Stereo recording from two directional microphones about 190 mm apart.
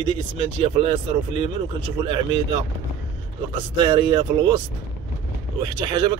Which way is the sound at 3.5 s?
25° right (ahead or behind).